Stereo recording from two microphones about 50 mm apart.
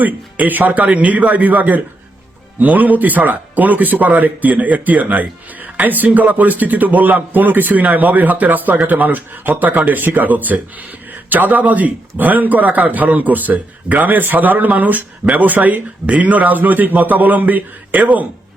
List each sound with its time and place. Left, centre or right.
0.0 s speech: right